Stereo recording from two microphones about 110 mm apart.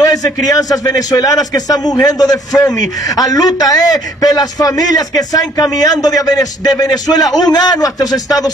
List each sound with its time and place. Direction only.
0.0 s a man's voice: 35° left (ahead or behind)